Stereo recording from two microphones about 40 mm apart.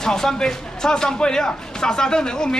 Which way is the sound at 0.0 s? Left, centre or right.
Centre.